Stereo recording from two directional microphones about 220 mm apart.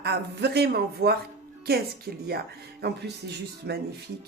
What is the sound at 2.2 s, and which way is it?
A woman's voice, 45° right (ahead or behind).